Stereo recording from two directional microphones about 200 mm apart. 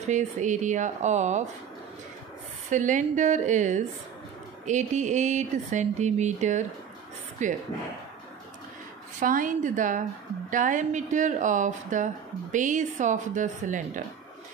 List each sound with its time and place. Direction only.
0.0 s speech: 35° right (ahead or behind)
2.7 s speech: 40° right (ahead or behind)
9.2 s speech: 40° right (ahead or behind)